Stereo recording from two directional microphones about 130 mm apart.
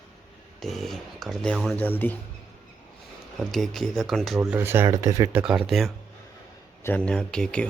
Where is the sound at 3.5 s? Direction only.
Centre (ahead or behind).